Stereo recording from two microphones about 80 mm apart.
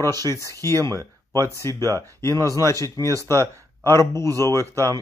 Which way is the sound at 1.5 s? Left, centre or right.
Left.